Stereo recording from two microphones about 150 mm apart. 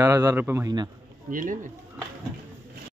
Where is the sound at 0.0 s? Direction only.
25° right (ahead or behind).